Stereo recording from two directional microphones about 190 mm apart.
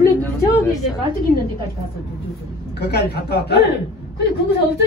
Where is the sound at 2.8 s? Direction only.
60° left (ahead or behind).